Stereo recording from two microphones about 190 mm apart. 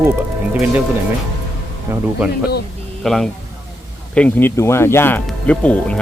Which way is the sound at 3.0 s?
Centre (ahead or behind).